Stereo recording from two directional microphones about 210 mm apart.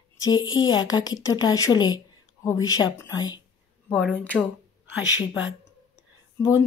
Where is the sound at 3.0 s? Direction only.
15° left (ahead or behind).